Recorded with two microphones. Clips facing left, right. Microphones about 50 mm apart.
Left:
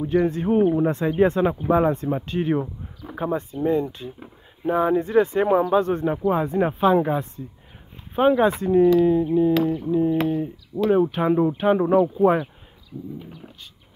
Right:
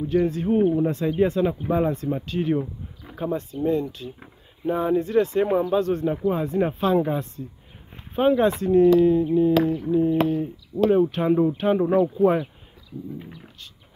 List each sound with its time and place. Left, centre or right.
0.1 s speech: left
8.2 s speech: centre